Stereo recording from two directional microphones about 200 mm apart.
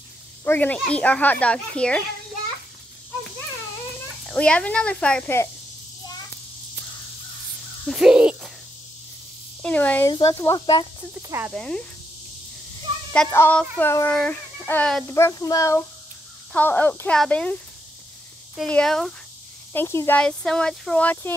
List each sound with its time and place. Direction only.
0.5 s a child's voice: 10° left (ahead or behind)
4.3 s speech: 5° left (ahead or behind)
7.8 s a sound: 5° right (ahead or behind)
9.6 s speech: 5° left (ahead or behind)
11.2 s speech: 10° right (ahead or behind)
11.5 s a child's voice: 5° left (ahead or behind)
13.3 s a child's voice: 10° left (ahead or behind)
15.1 s speech: 15° left (ahead or behind)
18.6 s a child's voice: 5° left (ahead or behind)